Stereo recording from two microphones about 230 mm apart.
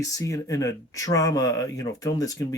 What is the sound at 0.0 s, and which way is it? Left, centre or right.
Speech, centre.